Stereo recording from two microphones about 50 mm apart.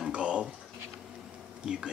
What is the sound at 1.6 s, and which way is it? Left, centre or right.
Speech, centre.